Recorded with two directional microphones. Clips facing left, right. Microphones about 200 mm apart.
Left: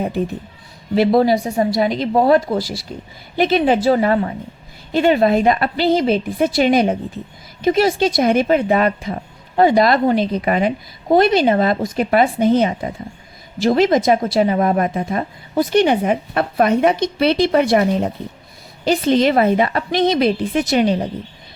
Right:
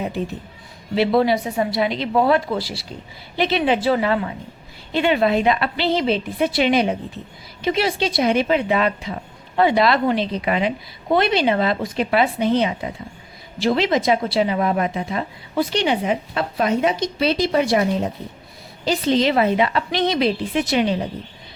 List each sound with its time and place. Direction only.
0.9 s a woman's voice: 40° left (ahead or behind)